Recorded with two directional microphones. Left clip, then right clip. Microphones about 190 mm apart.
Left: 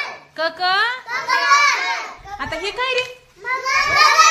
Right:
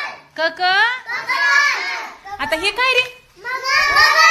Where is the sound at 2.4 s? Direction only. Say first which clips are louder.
Right 5 dB; 25° right (ahead or behind).